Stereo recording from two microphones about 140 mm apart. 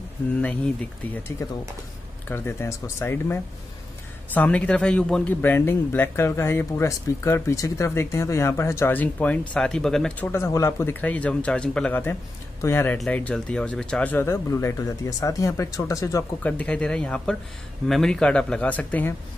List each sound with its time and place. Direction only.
1.4 s speech: 20° left (ahead or behind); by 10.3 s 5° left (ahead or behind)
10.3 s speech: 20° left (ahead or behind)
12.9 s speech: 5° left (ahead or behind); by 16.3 s 20° left (ahead or behind)
16.4 s speech: 10° left (ahead or behind)